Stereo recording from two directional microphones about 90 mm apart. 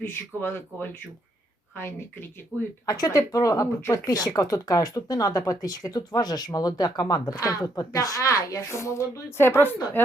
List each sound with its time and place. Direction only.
0.0 s speech: 20° left (ahead or behind)
2.8 s speech: 45° left (ahead or behind)
4.0 s speech: 45° left (ahead or behind); by 10.0 s 25° left (ahead or behind)